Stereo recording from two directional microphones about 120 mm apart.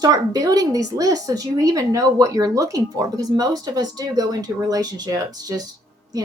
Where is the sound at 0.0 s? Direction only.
30° right (ahead or behind).